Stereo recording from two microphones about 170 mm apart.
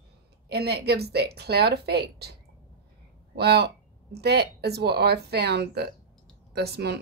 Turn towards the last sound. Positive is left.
turn(degrees=-75)  # may be behind; listen again after turning